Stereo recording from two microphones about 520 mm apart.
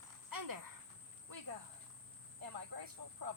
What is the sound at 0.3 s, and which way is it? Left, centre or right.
Cricket, right.